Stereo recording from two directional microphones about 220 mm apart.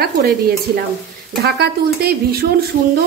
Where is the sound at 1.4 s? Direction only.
45° right (ahead or behind).